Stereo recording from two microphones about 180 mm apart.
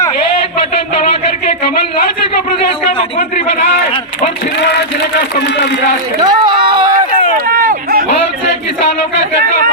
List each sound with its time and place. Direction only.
6.2 s speech: 25° right (ahead or behind)
7.5 s run: 50° right (ahead or behind)